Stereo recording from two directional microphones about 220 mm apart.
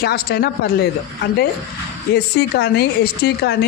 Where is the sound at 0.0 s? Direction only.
45° left (ahead or behind).